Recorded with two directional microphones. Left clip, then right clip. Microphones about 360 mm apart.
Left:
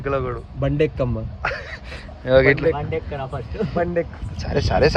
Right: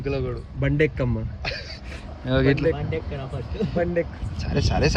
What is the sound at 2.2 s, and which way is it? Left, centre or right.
Speech, left.